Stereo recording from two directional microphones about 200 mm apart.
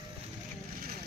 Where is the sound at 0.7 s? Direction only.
45° right (ahead or behind).